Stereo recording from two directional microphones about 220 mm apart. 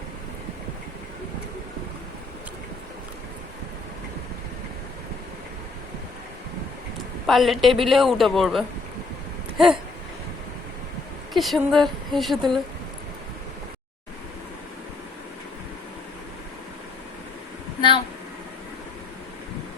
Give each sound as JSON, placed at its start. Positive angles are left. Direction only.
{"t": 7.3, "sound": "a woman's voice", "side_deg": 0}
{"t": 11.3, "sound": "a woman's voice", "side_deg": 0}
{"t": 17.7, "sound": "a sound", "side_deg": 20}